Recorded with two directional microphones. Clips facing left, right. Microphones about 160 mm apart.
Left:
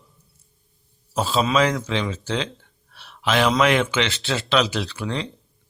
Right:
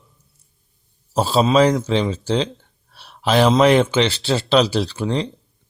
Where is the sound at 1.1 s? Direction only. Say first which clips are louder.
Right 5 dB; 35° right (ahead or behind).